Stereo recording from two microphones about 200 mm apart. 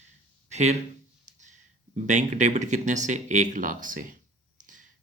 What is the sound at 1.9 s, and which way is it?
Speech, 35° right (ahead or behind).